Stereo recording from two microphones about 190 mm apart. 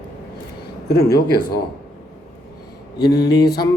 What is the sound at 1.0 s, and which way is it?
Speech, 20° left (ahead or behind).